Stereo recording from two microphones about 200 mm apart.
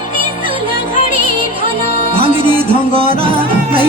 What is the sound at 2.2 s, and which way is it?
Music, 25° right (ahead or behind).